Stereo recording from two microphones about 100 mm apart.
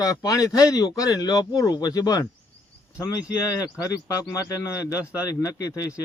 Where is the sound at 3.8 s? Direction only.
35° left (ahead or behind).